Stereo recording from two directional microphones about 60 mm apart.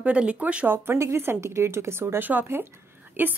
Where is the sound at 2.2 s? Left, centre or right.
Right.